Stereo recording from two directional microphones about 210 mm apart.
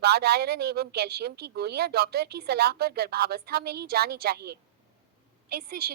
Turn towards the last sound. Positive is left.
turn(degrees=-45)  # may be behind; listen again after turning